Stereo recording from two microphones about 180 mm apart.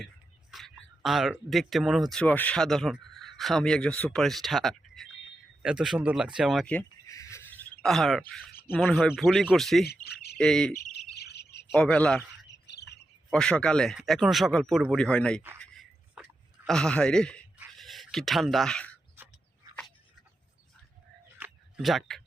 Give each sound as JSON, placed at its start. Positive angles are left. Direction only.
{"t": 0.5, "sound": "speech", "side_deg": 0}
{"t": 7.1, "sound": "cricket", "side_deg": 15}
{"t": 8.8, "sound": "speech", "side_deg": 0}
{"t": 9.8, "sound": "insect", "side_deg": 60}
{"t": 10.3, "sound": "insect", "side_deg": 5}
{"t": 11.1, "sound": "cricket", "side_deg": 65}
{"t": 11.7, "sound": "speech", "side_deg": 5}
{"t": 12.5, "sound": "bird", "side_deg": 70}
{"t": 13.3, "sound": "speech", "side_deg": 5}
{"t": 16.2, "sound": "a sound", "side_deg": -5}
{"t": 16.6, "sound": "speech", "side_deg": 5}
{"t": 21.3, "sound": "a sound", "side_deg": -5}